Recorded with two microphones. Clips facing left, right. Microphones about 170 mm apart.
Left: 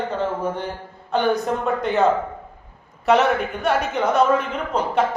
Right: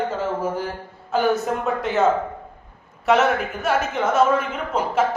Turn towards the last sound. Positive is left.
turn(degrees=-5)  # may be behind; listen again after turning